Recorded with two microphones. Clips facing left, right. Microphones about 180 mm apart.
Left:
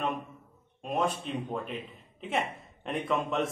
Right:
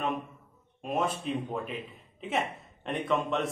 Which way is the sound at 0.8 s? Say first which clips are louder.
Even; centre (ahead or behind).